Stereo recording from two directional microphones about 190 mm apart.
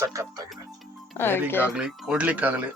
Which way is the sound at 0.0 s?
15° right (ahead or behind).